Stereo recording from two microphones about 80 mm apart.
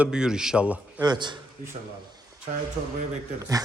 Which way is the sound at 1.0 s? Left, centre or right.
Right.